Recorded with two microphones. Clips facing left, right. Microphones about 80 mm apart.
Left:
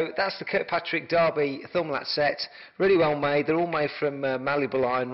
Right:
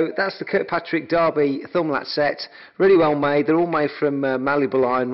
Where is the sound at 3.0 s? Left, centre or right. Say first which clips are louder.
Right 6 dB; right.